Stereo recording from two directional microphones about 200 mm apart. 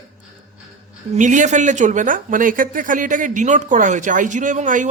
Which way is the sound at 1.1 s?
40° right (ahead or behind).